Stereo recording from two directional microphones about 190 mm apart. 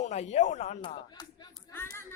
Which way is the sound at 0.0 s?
35° left (ahead or behind).